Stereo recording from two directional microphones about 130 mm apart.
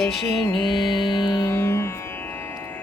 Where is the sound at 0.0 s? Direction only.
Centre (ahead or behind).